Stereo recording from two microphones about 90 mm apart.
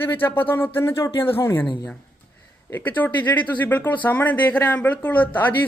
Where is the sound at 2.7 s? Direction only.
20° left (ahead or behind).